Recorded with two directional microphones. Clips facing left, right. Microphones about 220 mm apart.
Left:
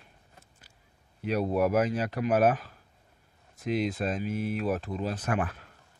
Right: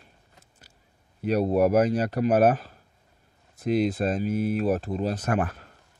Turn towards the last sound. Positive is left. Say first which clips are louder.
# right 4 dB
turn(degrees=-45)  # may be behind; listen again after turning